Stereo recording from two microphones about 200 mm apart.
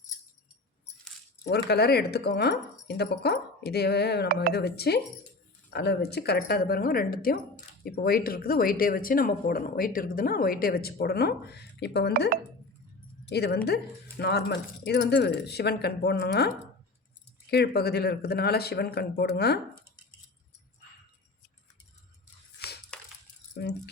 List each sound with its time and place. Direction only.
1.5 s speech: 55° left (ahead or behind)
13.3 s speech: 55° left (ahead or behind)
17.5 s speech: 50° left (ahead or behind)
22.9 s a sound: 5° left (ahead or behind)
23.6 s speech: 55° left (ahead or behind)